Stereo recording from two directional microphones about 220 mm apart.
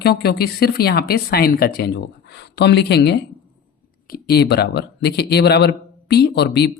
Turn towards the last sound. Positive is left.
turn(degrees=50)  # may be behind; listen again after turning